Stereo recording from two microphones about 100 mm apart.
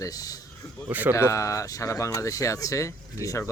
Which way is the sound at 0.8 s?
15° right (ahead or behind).